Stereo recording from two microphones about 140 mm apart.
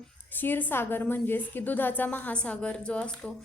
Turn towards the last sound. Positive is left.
turn(degrees=10)  # may be behind; listen again after turning